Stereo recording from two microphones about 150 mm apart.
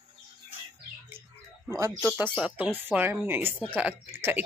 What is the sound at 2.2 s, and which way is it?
Speech, 5° right (ahead or behind).